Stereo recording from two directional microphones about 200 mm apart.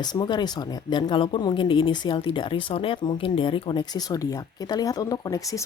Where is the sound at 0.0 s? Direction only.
20° left (ahead or behind).